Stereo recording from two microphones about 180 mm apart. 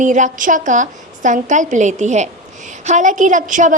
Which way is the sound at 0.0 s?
45° right (ahead or behind).